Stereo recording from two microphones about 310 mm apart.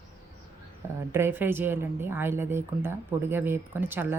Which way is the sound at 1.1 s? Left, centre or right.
Centre.